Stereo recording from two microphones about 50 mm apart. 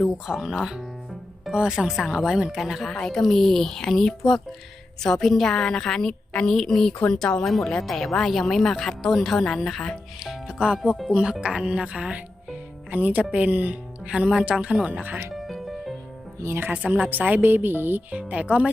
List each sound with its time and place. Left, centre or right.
0.3 s a woman's voice: centre
2.6 s speech: centre
3.0 s a woman's voice: centre
7.4 s a woman's voice: centre
10.2 s speech: centre; by 14.1 s right
14.1 s a woman's voice: centre
14.4 s speech: right
15.4 s music: centre
16.4 s speech: right
17.1 s a woman's voice: right
18.1 s speech: right